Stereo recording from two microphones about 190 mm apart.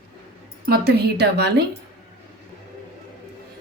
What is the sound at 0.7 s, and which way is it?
Speech, 55° right (ahead or behind).